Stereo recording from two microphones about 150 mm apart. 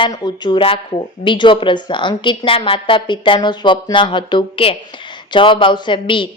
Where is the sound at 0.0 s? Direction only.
30° left (ahead or behind).